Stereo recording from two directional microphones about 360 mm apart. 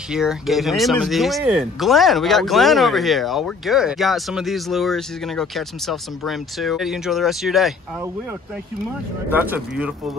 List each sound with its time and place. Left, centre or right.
0.1 s speech: centre
9.3 s speech: centre